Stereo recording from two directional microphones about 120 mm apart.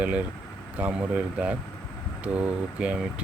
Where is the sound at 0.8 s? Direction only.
10° right (ahead or behind).